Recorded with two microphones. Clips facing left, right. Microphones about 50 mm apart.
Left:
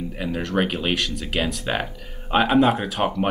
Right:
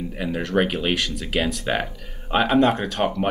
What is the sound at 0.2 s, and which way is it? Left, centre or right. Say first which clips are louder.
Speech: right 2 dB; centre.